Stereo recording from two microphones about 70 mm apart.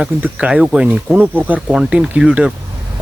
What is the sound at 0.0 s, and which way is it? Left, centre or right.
Speech, centre.